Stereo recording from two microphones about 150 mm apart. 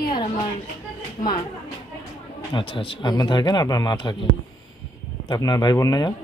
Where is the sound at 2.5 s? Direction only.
35° left (ahead or behind).